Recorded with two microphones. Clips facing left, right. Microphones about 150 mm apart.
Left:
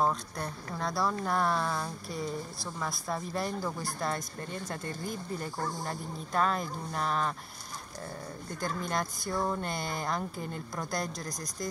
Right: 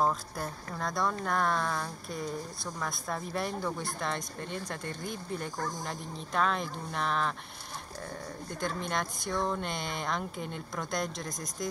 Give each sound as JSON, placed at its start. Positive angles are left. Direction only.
{"t": 0.0, "sound": "speech", "side_deg": 0}
{"t": 8.5, "sound": "speech", "side_deg": 5}